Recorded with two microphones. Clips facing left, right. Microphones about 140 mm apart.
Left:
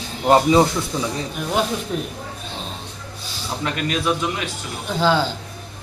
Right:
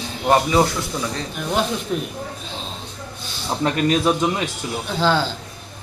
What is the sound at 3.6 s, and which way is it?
Speech, 35° right (ahead or behind).